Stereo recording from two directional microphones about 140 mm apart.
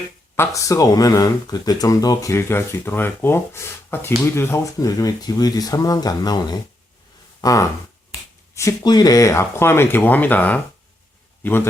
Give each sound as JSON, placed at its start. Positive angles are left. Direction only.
{"t": 0.3, "sound": "speech", "side_deg": 20}